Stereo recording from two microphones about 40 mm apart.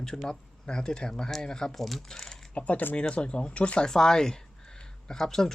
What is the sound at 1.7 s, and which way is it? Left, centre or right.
Speech, centre.